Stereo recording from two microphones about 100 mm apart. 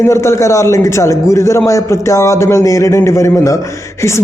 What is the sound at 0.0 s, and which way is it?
A man's voice, 30° left (ahead or behind).